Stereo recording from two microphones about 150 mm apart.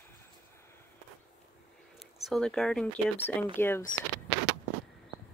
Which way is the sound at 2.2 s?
5° left (ahead or behind).